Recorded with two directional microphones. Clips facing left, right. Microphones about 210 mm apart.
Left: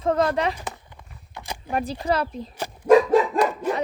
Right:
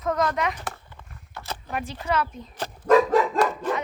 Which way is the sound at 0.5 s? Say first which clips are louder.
Left 1 dB; 15° left (ahead or behind).